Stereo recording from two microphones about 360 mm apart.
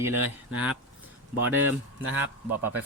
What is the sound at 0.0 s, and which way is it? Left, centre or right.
Speech, centre.